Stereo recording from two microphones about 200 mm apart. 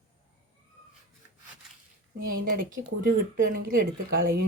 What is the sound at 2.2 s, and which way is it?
Speech, 45° right (ahead or behind).